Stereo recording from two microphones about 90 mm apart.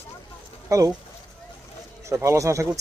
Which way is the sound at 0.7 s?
40° right (ahead or behind).